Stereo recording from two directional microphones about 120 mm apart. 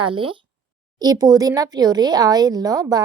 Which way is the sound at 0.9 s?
35° right (ahead or behind).